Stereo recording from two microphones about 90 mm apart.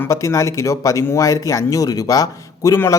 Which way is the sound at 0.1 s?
35° left (ahead or behind).